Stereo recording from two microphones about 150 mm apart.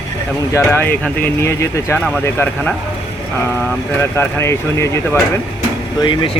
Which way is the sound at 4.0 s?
15° left (ahead or behind).